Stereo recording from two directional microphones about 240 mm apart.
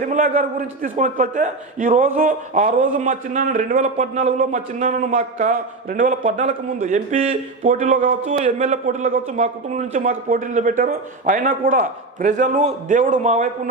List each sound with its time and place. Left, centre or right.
0.0 s a man's voice: right